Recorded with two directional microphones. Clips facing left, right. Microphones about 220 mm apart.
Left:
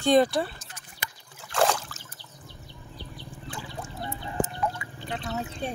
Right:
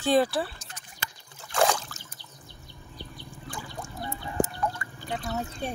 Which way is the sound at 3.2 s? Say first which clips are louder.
Left 2 dB; 5° left (ahead or behind).